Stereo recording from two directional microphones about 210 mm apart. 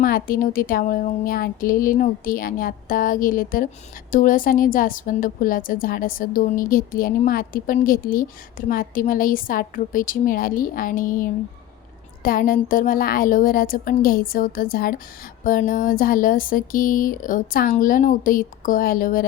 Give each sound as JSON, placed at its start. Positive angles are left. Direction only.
{"t": 0.0, "sound": "a woman's voice", "side_deg": 45}